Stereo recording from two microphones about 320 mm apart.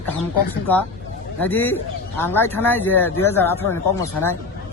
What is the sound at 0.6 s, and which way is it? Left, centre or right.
A man's voice, centre.